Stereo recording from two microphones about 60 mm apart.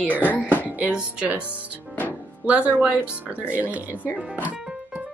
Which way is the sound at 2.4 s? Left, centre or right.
Right.